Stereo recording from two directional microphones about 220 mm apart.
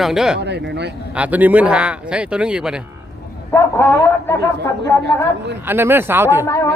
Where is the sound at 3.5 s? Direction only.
10° left (ahead or behind).